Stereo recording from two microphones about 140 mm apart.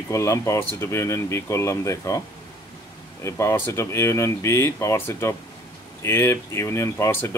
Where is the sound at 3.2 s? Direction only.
20° left (ahead or behind).